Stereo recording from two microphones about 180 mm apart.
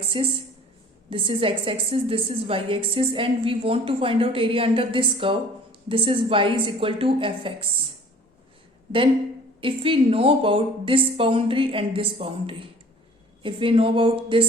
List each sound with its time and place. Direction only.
0.1 s a woman's voice: 30° right (ahead or behind)
9.6 s a woman's voice: 30° right (ahead or behind)